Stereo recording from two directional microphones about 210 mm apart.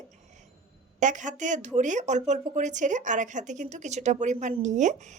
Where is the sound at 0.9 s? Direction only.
35° right (ahead or behind).